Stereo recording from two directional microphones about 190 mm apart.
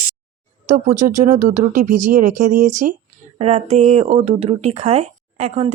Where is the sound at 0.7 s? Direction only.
40° right (ahead or behind).